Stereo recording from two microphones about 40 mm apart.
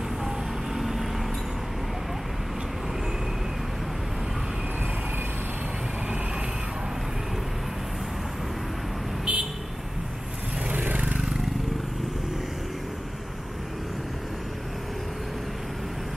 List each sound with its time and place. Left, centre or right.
0.7 s vehicle: centre
9.2 s vehicle: right
10.7 s vehicle: right